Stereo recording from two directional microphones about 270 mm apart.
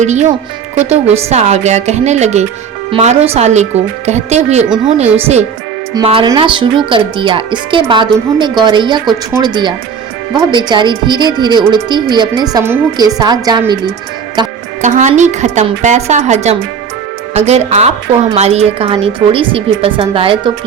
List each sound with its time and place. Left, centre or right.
0.0 s a woman's voice: right
14.3 s a woman's voice: right